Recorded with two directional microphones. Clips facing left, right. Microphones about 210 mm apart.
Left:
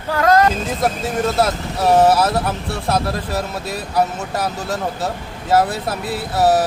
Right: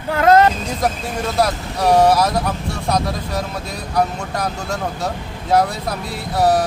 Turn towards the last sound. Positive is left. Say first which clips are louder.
# left 1 dB
turn(degrees=5)  # may be behind; listen again after turning